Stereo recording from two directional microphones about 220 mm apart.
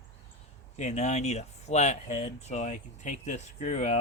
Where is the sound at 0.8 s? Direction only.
30° left (ahead or behind).